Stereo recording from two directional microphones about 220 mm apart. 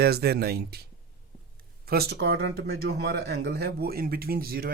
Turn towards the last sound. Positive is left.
turn(degrees=-45)  # may be behind; listen again after turning